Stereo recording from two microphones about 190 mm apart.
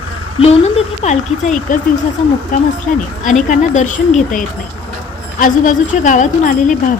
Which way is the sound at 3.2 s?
40° left (ahead or behind).